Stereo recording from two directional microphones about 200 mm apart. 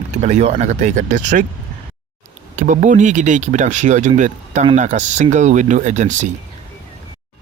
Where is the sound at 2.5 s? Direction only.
40° right (ahead or behind).